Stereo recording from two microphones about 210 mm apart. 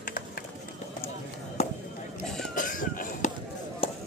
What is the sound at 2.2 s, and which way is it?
Vehicle, centre (ahead or behind).